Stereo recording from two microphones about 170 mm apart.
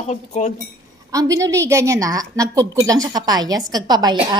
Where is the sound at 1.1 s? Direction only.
20° right (ahead or behind).